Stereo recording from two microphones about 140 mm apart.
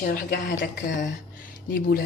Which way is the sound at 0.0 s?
90° left.